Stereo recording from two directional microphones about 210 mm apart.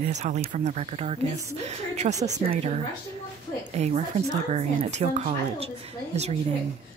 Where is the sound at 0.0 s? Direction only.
35° right (ahead or behind).